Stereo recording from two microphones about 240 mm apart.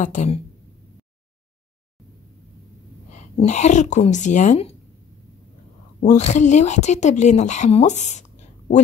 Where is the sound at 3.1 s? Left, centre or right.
Left.